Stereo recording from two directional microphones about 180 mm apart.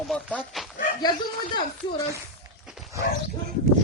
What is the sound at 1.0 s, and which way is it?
Speech, 20° left (ahead or behind).